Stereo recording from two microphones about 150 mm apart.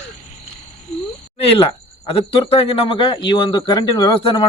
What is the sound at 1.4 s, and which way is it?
A man's voice, 40° left (ahead or behind).